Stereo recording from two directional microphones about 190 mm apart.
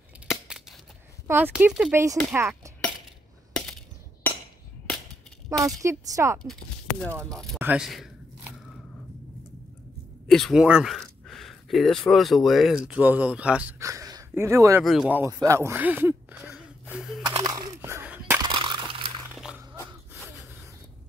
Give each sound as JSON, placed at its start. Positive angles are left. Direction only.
{"t": 0.3, "sound": "scissors", "side_deg": 0}
{"t": 1.2, "sound": "speech", "side_deg": -10}
{"t": 3.5, "sound": "a sound", "side_deg": 0}
{"t": 5.8, "sound": "speech", "side_deg": -15}
{"t": 6.4, "sound": "speech", "side_deg": 5}
{"t": 7.5, "sound": "speech", "side_deg": -10}
{"t": 10.2, "sound": "speech", "side_deg": 0}
{"t": 17.2, "sound": "a sound", "side_deg": -25}
{"t": 18.4, "sound": "crunch", "side_deg": -25}
{"t": 19.3, "sound": "a sound", "side_deg": -5}